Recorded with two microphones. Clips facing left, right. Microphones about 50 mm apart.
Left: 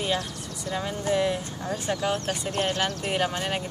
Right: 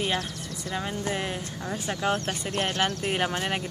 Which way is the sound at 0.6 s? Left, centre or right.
Centre.